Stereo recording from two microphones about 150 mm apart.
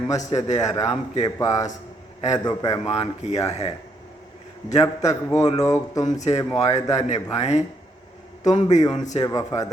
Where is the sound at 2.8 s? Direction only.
45° left (ahead or behind).